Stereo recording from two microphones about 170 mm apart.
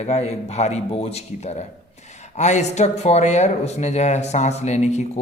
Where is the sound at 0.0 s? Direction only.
40° left (ahead or behind).